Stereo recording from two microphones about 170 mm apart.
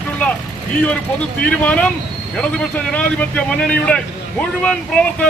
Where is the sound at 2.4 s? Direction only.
5° left (ahead or behind).